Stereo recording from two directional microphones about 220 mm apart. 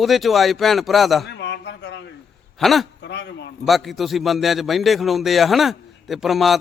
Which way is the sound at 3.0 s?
50° left (ahead or behind).